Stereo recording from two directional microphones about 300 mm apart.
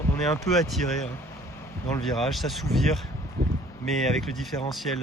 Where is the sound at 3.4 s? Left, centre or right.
Right.